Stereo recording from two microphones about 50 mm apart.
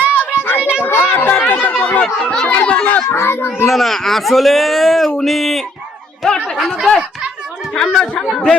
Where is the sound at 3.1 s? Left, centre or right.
Left.